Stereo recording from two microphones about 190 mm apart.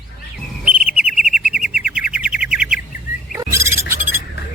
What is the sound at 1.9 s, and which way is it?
Bird, 5° right (ahead or behind).